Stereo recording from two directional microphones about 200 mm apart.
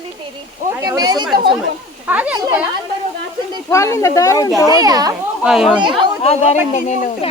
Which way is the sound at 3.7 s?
15° left (ahead or behind).